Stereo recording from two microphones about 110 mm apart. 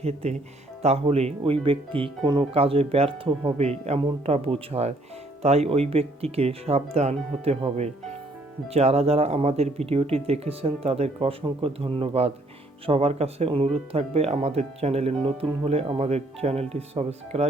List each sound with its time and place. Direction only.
0.0 s speech: 75° right (ahead or behind); by 2.5 s 45° right (ahead or behind)
2.5 s speech: 60° right (ahead or behind)
11.4 s speech: 55° right (ahead or behind); by 17.5 s 75° right (ahead or behind)